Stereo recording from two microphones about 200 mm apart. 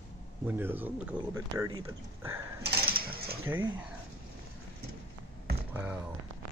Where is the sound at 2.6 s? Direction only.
50° right (ahead or behind).